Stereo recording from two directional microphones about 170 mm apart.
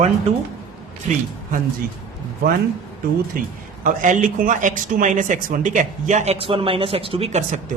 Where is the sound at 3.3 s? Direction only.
55° right (ahead or behind); by 7.6 s 40° right (ahead or behind).